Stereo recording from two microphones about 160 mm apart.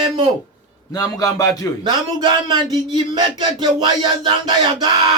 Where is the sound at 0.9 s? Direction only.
20° left (ahead or behind).